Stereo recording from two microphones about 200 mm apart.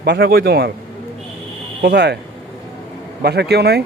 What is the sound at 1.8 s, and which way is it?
Speech, 55° right (ahead or behind).